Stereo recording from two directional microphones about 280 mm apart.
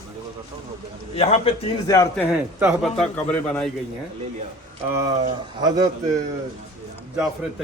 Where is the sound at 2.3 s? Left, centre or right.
Centre.